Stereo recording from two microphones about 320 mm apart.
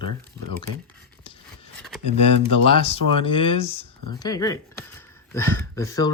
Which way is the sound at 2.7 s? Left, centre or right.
Centre.